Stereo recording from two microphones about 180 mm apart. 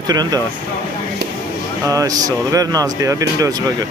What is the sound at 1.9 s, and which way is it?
Speech, 20° right (ahead or behind).